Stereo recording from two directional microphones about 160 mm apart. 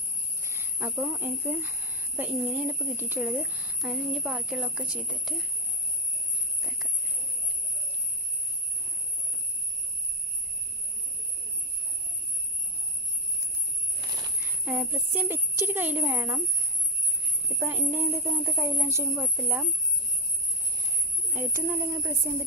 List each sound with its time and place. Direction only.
0.4 s speech: 15° right (ahead or behind); by 5.5 s centre (ahead or behind)
14.6 s a woman's voice: 10° right (ahead or behind)
17.6 s speech: 15° right (ahead or behind)
21.3 s speech: 15° right (ahead or behind)